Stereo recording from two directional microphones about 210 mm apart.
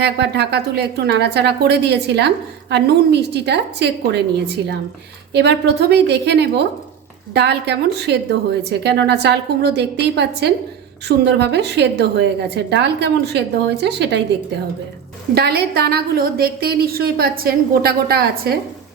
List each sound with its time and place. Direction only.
0.0 s speech: 50° right (ahead or behind)
5.3 s speech: 55° right (ahead or behind)
15.4 s speech: 50° right (ahead or behind)